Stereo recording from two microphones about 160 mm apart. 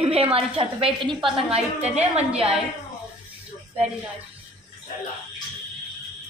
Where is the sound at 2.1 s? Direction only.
40° right (ahead or behind).